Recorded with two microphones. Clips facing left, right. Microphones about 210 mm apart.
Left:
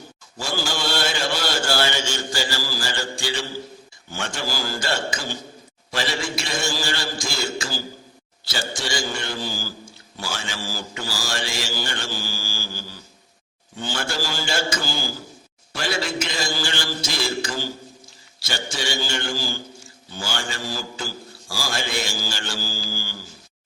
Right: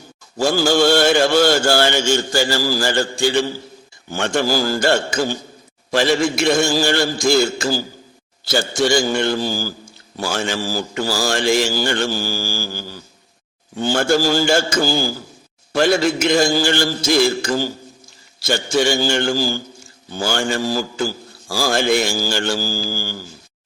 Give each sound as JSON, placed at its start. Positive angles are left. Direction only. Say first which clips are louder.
{"t": 0.3, "sound": "mantra", "louder": "right 12 dB", "side_deg": -50}
{"t": 10.2, "sound": "mantra", "louder": "right 10 dB", "side_deg": -50}
{"t": 15.7, "sound": "mantra", "louder": "right 11 dB", "side_deg": -50}